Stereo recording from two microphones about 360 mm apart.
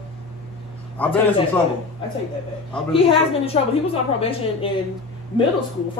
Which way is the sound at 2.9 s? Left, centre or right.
Centre.